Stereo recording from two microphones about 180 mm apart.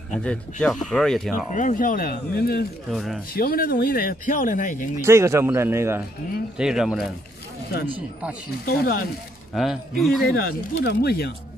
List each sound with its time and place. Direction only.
0.2 s speech: 5° left (ahead or behind)
1.5 s speech: 45° left (ahead or behind)
2.9 s speech: centre (ahead or behind)
3.3 s speech: 55° left (ahead or behind)
5.0 s speech: 15° right (ahead or behind)
8.6 s speech: 60° left (ahead or behind)
9.5 s speech: centre (ahead or behind)
10.2 s speech: 55° left (ahead or behind)